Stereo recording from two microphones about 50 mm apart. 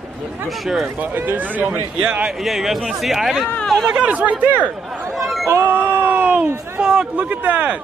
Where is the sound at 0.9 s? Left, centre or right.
Right.